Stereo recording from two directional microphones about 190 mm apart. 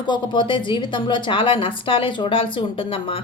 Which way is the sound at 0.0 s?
25° left (ahead or behind).